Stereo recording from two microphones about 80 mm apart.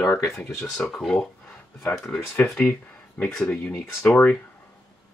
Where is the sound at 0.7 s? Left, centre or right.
Centre.